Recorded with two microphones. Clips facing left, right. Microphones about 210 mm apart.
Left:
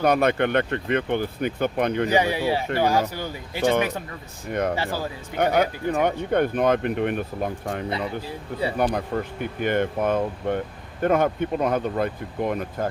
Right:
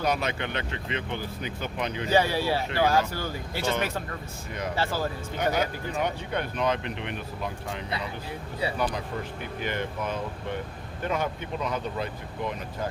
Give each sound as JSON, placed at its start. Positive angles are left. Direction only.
{"t": 0.0, "sound": "speech", "side_deg": 55}
{"t": 2.0, "sound": "speech", "side_deg": 15}
{"t": 5.4, "sound": "speech", "side_deg": 60}